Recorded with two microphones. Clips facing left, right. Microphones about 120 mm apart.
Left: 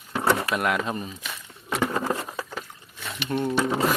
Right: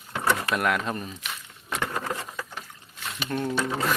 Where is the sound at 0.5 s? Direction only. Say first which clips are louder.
Left 1 dB; centre (ahead or behind).